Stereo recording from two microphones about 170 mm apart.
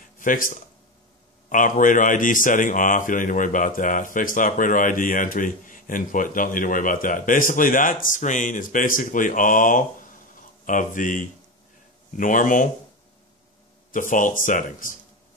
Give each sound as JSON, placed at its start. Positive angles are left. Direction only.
{"t": 0.2, "sound": "a man's voice", "side_deg": 50}
{"t": 13.9, "sound": "a man's voice", "side_deg": 50}